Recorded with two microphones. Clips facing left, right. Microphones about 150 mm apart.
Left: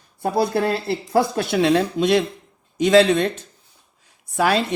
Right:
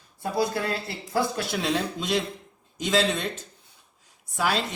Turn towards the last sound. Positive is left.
turn(degrees=60)  # may be behind; listen again after turning